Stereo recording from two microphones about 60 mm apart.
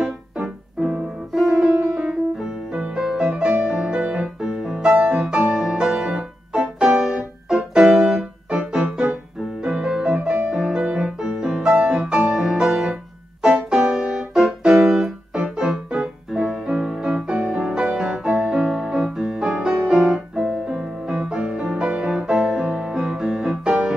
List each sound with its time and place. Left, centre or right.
0.0 s music: centre
3.5 s music: centre
20.3 s music: centre
21.1 s music: centre